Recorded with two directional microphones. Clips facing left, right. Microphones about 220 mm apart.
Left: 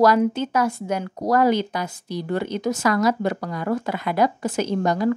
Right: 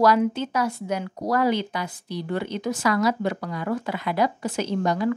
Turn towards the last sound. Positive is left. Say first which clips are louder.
# left 2 dB
turn(degrees=45)  # may be behind; listen again after turning